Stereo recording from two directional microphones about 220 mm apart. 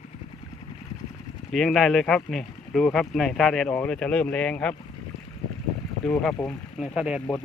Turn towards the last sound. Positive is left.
turn(degrees=0)  # may be behind; listen again after turning